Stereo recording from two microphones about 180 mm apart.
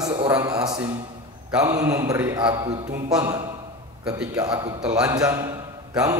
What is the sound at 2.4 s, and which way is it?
Speech, 25° right (ahead or behind).